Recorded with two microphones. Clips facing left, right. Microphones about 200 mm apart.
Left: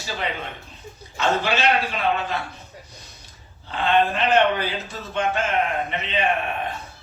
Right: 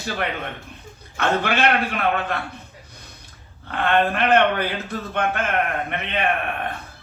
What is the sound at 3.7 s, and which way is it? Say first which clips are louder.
Speech: even; 55° right (ahead or behind).